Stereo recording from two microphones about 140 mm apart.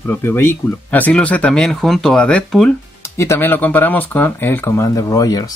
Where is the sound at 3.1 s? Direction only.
20° left (ahead or behind).